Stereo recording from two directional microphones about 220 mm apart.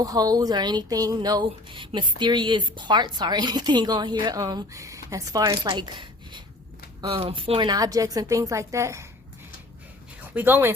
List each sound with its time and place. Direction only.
0.0 s a woman's voice: 15° right (ahead or behind)
10.2 s speech: 10° right (ahead or behind)